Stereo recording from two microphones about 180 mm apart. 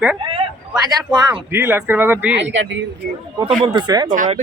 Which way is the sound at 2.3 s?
85° right.